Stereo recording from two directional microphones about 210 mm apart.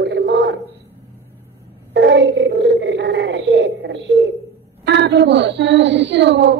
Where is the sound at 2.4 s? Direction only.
50° right (ahead or behind).